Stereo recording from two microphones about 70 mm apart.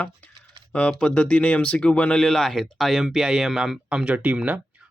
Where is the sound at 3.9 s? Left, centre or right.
Centre.